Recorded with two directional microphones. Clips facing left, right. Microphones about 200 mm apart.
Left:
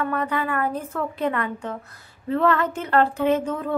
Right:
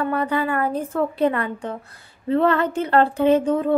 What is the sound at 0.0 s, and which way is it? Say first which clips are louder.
Speech: right 3 dB; 30° right (ahead or behind).